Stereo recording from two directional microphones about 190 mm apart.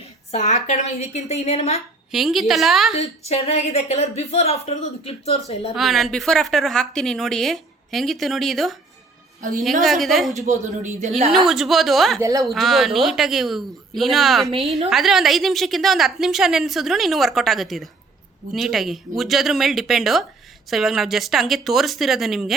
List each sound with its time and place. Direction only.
0.3 s speech: 35° left (ahead or behind)
2.1 s a woman's voice: centre (ahead or behind)
2.9 s speech: 35° left (ahead or behind)
5.7 s a woman's voice: centre (ahead or behind)
9.8 s a woman's voice: centre (ahead or behind)
10.3 s a man's voice: 35° right (ahead or behind)
11.3 s a woman's voice: centre (ahead or behind)
12.2 s speech: 15° right (ahead or behind)
12.5 s a woman's voice: centre (ahead or behind)